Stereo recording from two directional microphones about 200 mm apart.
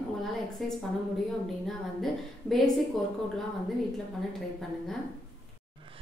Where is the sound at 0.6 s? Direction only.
Centre (ahead or behind).